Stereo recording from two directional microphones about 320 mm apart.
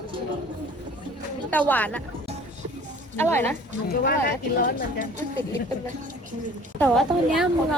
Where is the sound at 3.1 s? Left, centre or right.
Centre.